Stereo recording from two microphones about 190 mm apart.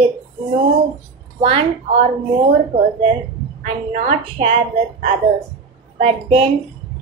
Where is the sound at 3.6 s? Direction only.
35° right (ahead or behind).